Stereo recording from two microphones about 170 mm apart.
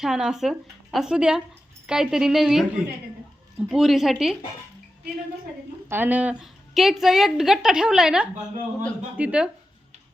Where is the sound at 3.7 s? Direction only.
Centre (ahead or behind).